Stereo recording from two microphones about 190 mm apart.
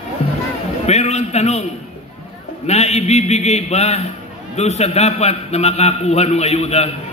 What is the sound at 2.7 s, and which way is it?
A man's voice, 35° left (ahead or behind).